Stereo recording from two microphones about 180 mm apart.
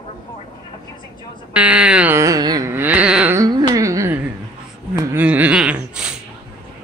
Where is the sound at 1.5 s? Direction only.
5° right (ahead or behind).